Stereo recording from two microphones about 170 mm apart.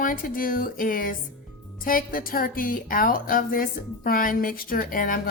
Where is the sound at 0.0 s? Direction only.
55° left (ahead or behind).